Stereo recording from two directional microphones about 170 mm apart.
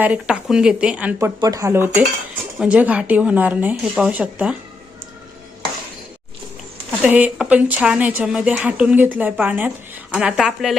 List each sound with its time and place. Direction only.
0.0 s speech: 5° right (ahead or behind)
1.4 s speech: 20° right (ahead or behind)
7.0 s speech: 10° right (ahead or behind)